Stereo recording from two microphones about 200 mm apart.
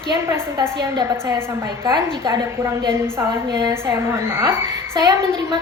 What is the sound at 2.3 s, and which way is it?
A woman's voice, 10° right (ahead or behind).